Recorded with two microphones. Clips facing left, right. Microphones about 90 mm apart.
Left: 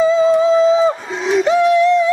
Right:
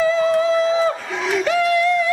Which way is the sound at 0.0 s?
20° left (ahead or behind).